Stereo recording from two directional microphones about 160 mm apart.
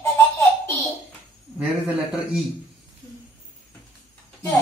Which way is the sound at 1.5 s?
5° right (ahead or behind).